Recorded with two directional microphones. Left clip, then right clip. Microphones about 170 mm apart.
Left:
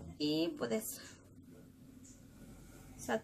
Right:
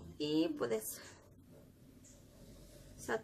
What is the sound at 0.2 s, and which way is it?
Speech, 25° right (ahead or behind).